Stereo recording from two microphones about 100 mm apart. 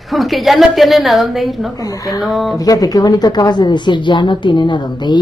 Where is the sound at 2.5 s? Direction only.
35° left (ahead or behind).